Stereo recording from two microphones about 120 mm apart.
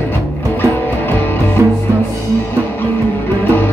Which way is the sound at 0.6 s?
15° left (ahead or behind).